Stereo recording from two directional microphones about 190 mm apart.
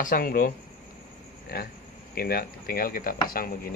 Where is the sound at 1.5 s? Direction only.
50° left (ahead or behind).